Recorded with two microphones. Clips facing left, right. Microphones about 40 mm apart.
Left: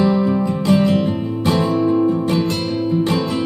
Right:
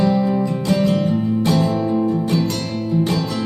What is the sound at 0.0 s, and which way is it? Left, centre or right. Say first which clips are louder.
Music: left 1 dB; centre.